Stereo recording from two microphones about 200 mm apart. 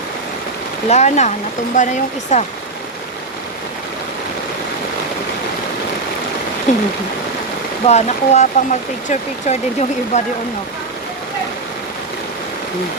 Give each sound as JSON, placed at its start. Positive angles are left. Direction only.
{"t": 0.9, "sound": "speech", "side_deg": 35}
{"t": 6.7, "sound": "speech", "side_deg": 40}
{"t": 7.9, "sound": "speech", "side_deg": 35}